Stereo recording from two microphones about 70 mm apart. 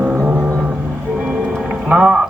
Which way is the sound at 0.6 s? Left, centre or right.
Centre.